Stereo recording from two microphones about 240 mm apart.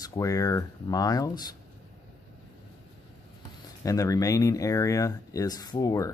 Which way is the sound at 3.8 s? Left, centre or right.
Centre.